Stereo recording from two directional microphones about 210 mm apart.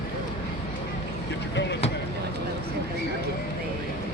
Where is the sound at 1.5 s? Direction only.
55° left (ahead or behind).